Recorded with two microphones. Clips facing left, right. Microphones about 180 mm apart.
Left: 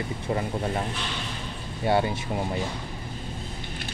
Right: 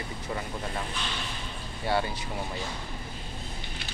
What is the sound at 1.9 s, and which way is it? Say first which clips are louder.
Speech: left 5 dB; 25° left (ahead or behind).